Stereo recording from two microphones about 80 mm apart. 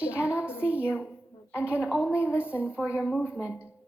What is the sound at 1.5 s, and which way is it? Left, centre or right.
A woman's voice, centre.